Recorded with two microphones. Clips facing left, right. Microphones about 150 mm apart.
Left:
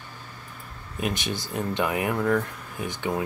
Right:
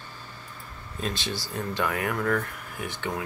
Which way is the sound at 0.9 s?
15° left (ahead or behind).